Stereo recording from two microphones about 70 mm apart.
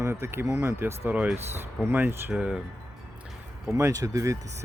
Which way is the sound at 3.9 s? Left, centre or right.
Right.